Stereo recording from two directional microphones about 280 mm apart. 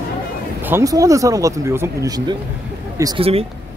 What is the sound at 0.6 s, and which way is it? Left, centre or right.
Speech, centre.